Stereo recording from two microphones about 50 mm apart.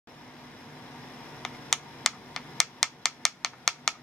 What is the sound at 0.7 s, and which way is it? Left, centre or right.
Vehicle, centre.